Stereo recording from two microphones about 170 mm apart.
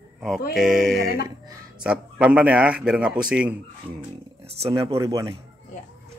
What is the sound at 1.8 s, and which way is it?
Speech, 5° right (ahead or behind).